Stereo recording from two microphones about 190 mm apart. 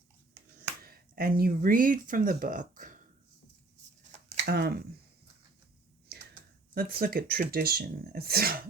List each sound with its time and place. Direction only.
0.8 s speech: 50° right (ahead or behind)
4.4 s speech: 55° right (ahead or behind)
6.7 s speech: 50° right (ahead or behind)